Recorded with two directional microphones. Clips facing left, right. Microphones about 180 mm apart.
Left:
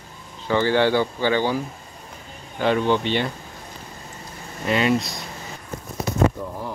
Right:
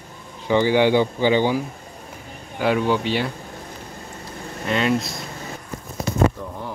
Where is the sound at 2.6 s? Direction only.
10° right (ahead or behind).